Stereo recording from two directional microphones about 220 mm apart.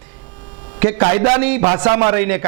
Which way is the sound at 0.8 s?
20° right (ahead or behind).